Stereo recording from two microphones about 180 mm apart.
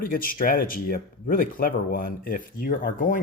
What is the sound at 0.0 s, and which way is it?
Speech, 50° left (ahead or behind).